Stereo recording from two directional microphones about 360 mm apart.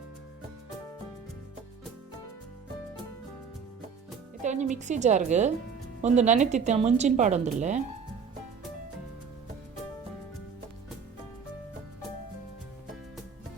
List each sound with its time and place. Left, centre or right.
4.4 s speech: centre